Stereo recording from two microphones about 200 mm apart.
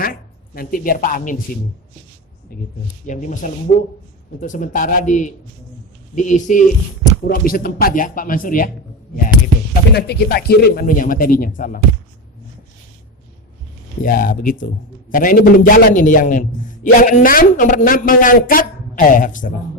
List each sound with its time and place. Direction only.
0.0 s speech: 45° left (ahead or behind)
3.1 s a man's voice: 40° left (ahead or behind)
9.9 s a man's voice: 50° left (ahead or behind)
14.0 s a man's voice: 45° left (ahead or behind)